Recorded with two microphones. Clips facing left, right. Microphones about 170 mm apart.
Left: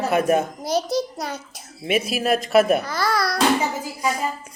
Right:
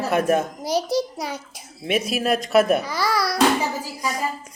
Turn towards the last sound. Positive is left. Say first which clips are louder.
# left 2 dB
turn(degrees=5)  # may be behind; listen again after turning